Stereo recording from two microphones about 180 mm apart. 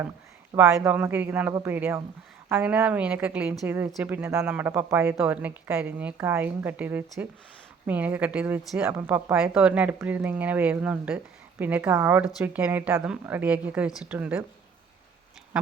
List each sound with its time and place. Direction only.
0.5 s a woman's voice: 15° right (ahead or behind)